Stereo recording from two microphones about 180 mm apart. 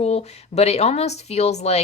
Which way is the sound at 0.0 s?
35° left (ahead or behind).